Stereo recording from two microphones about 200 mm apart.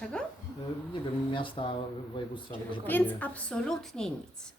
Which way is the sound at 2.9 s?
10° left (ahead or behind).